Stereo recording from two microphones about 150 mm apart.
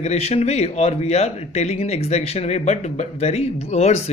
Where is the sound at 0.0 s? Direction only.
45° left (ahead or behind).